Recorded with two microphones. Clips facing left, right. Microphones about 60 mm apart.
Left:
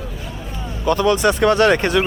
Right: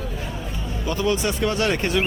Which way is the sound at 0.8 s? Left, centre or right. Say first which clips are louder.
Left 7 dB; left.